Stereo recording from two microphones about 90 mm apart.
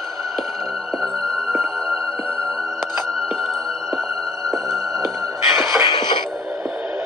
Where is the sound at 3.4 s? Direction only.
5° left (ahead or behind).